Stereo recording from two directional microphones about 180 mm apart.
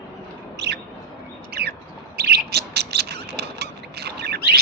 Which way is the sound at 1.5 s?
65° right (ahead or behind).